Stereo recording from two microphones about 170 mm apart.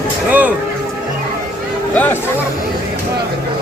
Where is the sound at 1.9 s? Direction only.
10° left (ahead or behind).